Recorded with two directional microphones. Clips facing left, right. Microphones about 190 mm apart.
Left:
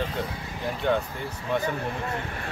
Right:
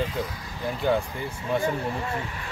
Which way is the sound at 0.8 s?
5° right (ahead or behind).